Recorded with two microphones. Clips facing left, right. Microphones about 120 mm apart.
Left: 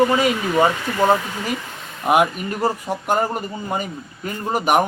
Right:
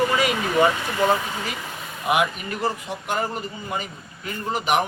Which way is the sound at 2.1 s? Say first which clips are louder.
Left 5 dB; 40° left (ahead or behind).